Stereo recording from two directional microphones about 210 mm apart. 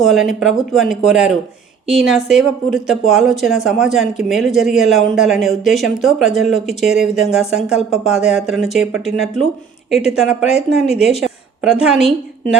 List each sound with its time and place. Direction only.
0.0 s a woman's voice: centre (ahead or behind)